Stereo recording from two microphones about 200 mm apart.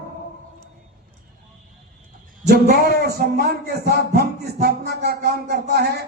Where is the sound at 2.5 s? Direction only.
50° right (ahead or behind).